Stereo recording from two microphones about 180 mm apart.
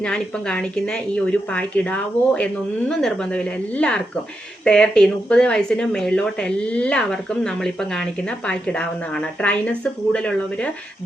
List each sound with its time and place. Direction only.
0.0 s a woman's voice: 5° left (ahead or behind)